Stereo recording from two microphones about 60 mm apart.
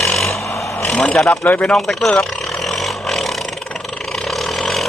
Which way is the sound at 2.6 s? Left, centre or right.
Centre.